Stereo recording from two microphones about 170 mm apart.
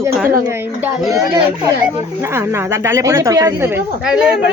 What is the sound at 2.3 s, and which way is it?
A woman's voice, 15° right (ahead or behind).